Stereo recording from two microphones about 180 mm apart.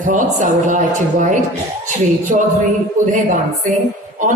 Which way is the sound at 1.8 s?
45° right (ahead or behind).